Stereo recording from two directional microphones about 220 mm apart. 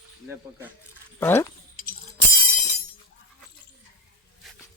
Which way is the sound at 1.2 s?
10° left (ahead or behind).